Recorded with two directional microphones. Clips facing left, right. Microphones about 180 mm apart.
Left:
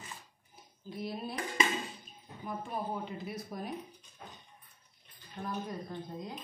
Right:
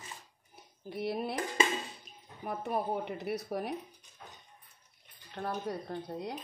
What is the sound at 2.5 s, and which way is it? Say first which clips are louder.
Speech: right 4 dB; 70° right (ahead or behind).